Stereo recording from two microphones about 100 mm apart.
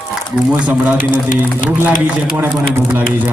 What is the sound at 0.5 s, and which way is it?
Speech, 15° right (ahead or behind).